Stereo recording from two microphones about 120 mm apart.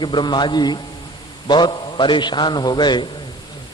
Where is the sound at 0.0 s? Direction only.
40° left (ahead or behind).